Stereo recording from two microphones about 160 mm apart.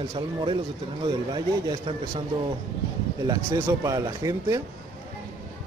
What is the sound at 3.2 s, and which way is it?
A man's voice, 25° right (ahead or behind).